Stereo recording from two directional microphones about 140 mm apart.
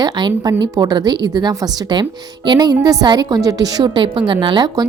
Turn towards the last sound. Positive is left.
turn(degrees=-35)  # may be behind; listen again after turning